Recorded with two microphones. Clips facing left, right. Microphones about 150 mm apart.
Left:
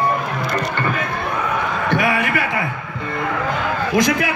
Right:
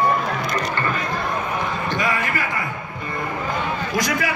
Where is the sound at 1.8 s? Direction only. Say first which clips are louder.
Left 7 dB; 65° left (ahead or behind).